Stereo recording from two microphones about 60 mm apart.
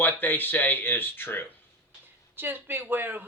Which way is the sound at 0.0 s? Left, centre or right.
Left.